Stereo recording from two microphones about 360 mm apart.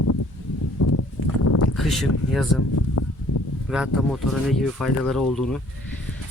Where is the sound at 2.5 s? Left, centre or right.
Left.